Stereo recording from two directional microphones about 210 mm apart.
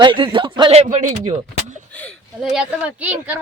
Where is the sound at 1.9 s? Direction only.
5° left (ahead or behind).